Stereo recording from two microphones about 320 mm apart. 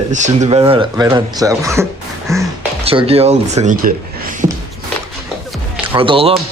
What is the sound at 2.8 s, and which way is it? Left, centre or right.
Speech, centre.